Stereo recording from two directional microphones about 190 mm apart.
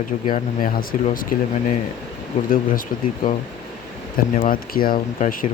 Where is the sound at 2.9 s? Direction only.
45° left (ahead or behind).